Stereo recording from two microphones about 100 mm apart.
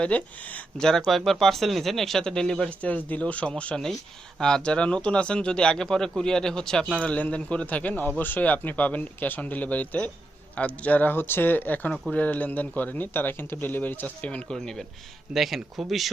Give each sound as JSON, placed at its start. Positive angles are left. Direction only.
{"t": 0.0, "sound": "speech", "side_deg": 15}